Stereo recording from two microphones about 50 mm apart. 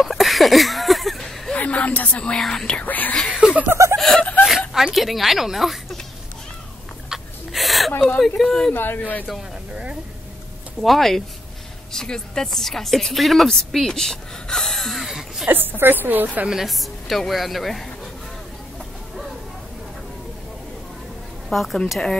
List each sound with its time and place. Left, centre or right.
0.0 s a sound: centre
1.5 s speech: left
2.3 s speech: centre
2.8 s speech: left
3.4 s chuckle: centre
4.0 s speech: centre
4.5 s a woman's voice: centre
7.1 s a sound: centre
8.4 s speech: centre
8.7 s speech: left
10.8 s speech: centre
15.4 s a woman's voice: right
16.4 s speech: centre
21.5 s speech: centre